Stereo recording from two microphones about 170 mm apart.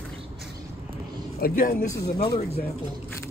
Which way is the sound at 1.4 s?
55° left (ahead or behind).